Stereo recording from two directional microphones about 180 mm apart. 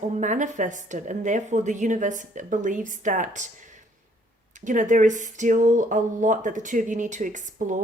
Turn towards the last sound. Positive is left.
turn(degrees=-45)  # may be behind; listen again after turning